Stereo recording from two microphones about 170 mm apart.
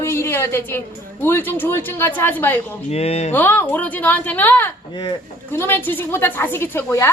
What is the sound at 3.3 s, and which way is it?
A woman's voice, 10° left (ahead or behind).